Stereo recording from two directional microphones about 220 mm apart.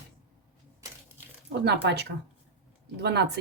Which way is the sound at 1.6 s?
50° right (ahead or behind).